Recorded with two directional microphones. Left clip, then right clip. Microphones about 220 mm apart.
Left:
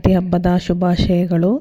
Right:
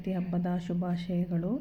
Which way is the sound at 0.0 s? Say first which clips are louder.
Left 18 dB; 45° left (ahead or behind).